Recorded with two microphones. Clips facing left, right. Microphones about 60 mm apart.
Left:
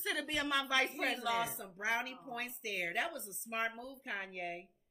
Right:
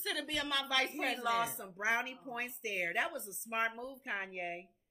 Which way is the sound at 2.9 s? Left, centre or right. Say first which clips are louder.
Right 2 dB; centre.